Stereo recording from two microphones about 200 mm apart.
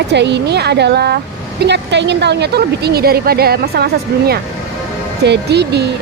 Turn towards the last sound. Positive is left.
turn(degrees=-55)  # may be behind; listen again after turning